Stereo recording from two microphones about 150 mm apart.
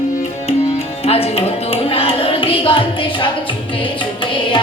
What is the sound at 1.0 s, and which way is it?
Music, 40° left (ahead or behind).